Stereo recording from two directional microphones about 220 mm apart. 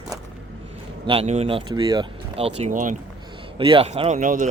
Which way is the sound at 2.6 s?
35° right (ahead or behind).